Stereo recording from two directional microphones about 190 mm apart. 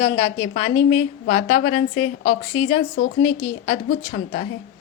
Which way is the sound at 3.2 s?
30° left (ahead or behind).